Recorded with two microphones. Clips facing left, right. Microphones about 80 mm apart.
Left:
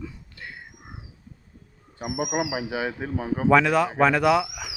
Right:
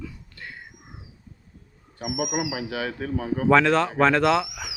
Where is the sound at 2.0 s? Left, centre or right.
Left.